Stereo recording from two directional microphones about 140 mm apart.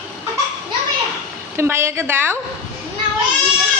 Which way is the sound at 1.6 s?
20° right (ahead or behind).